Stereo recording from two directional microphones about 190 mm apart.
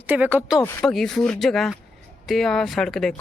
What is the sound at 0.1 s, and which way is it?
Speech, 10° right (ahead or behind).